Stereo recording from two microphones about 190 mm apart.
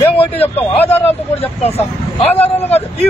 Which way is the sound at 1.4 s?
30° left (ahead or behind).